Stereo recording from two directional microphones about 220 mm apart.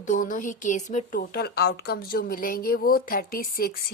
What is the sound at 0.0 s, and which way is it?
A woman's voice, 35° left (ahead or behind).